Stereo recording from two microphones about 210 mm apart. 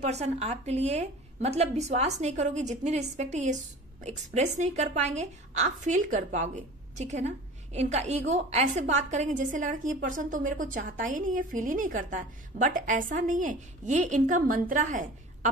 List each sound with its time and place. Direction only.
0.0 s a woman's voice: 30° right (ahead or behind)